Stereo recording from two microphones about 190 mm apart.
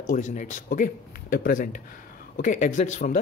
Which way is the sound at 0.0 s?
45° left (ahead or behind).